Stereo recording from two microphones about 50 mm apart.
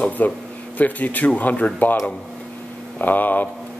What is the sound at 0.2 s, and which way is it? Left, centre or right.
Speech, left.